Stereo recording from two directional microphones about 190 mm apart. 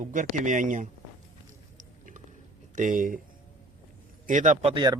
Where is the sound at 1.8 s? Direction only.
45° right (ahead or behind).